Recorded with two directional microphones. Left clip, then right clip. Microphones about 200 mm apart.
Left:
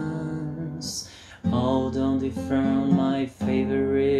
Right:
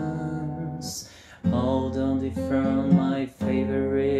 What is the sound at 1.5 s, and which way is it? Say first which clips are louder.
Music: left 1 dB; centre (ahead or behind).